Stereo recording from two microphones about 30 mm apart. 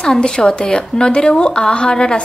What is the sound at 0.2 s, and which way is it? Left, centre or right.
Speech, left.